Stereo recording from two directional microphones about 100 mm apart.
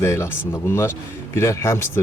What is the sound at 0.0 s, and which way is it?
Speech, 30° left (ahead or behind).